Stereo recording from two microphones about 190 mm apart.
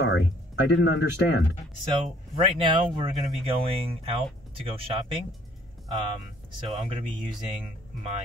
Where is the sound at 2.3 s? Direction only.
25° right (ahead or behind).